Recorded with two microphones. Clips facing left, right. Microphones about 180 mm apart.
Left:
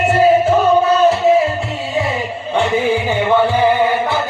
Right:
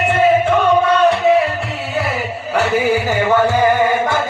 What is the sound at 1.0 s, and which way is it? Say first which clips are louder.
Music: left 1 dB; centre (ahead or behind).